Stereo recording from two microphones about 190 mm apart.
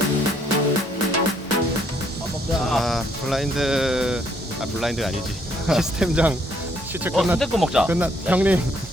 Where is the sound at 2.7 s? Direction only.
Centre (ahead or behind).